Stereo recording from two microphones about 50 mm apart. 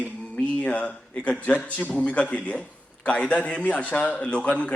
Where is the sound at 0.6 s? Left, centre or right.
Left.